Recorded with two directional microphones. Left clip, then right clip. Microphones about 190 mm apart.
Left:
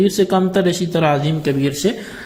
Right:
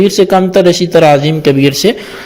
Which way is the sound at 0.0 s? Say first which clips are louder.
Right 8 dB; 35° right (ahead or behind).